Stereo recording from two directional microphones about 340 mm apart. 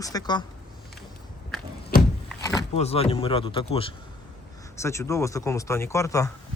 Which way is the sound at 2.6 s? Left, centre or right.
Centre.